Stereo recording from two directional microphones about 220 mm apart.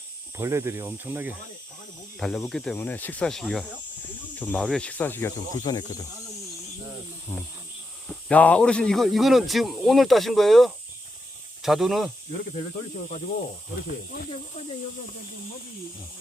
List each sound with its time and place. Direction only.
0.3 s speech: 10° right (ahead or behind)
2.1 s speech: centre (ahead or behind); by 6.1 s 15° left (ahead or behind)
8.3 s speech: 5° left (ahead or behind)